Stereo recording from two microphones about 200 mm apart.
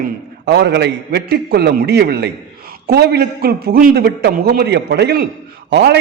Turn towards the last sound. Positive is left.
turn(degrees=-55)  # may be behind; listen again after turning